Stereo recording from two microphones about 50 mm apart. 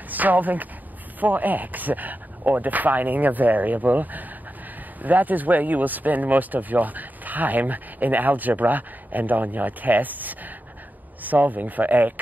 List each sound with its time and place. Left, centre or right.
0.1 s speech: right